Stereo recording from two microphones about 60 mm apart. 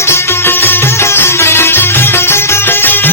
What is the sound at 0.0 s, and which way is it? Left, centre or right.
Music, left.